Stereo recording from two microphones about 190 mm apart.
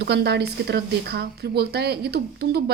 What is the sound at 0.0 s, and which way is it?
A woman's voice, 60° right (ahead or behind).